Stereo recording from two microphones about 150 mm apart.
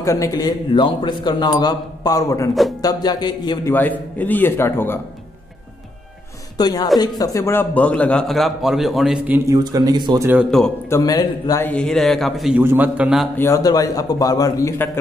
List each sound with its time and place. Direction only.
0.0 s a man's voice: 20° left (ahead or behind)
3.7 s a man's voice: 10° left (ahead or behind)
6.6 s a man's voice: 25° left (ahead or behind); by 9.4 s 5° right (ahead or behind)
9.5 s speech: 25° right (ahead or behind)
10.5 s a man's voice: 5° left (ahead or behind)
10.9 s a man's voice: 20° left (ahead or behind)
11.6 s a man's voice: 5° left (ahead or behind)
12.5 s a man's voice: 10° right (ahead or behind)
13.4 s a man's voice: 20° left (ahead or behind)